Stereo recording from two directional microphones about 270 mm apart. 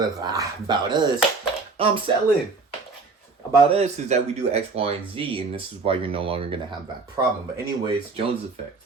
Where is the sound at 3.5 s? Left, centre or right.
Right.